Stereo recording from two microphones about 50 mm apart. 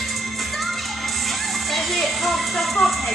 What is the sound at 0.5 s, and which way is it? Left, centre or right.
Music, centre.